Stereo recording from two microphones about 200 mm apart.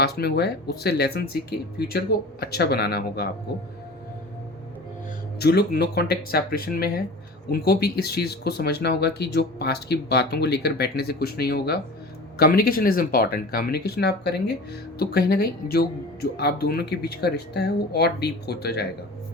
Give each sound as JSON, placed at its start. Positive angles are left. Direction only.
{"t": 0.0, "sound": "speech", "side_deg": 55}
{"t": 5.4, "sound": "speech", "side_deg": 55}